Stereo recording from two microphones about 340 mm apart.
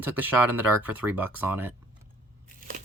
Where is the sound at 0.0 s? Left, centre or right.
Centre.